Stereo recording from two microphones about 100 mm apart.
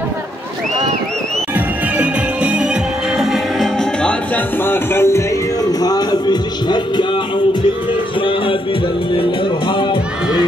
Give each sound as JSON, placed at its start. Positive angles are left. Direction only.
{"t": 2.0, "sound": "music", "side_deg": -10}
{"t": 4.6, "sound": "music", "side_deg": 25}
{"t": 5.7, "sound": "music", "side_deg": 40}